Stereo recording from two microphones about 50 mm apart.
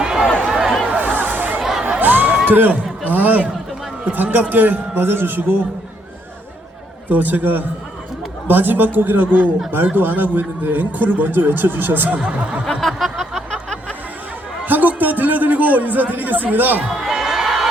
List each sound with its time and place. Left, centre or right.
0.0 s a sound: centre
0.9 s a sound: right
2.0 s crowd: right
2.5 s a man's voice: right
7.1 s a man's voice: right
12.6 s music: centre
13.5 s music: centre
14.6 s a sound: right
16.1 s a man's voice: right
16.9 s crowd: centre